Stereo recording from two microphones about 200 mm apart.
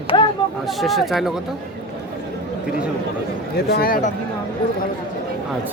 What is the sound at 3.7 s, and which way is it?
Speech, 50° left (ahead or behind).